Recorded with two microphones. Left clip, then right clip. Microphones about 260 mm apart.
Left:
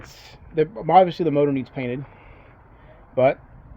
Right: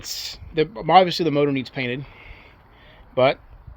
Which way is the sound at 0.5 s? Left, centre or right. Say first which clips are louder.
Even; right.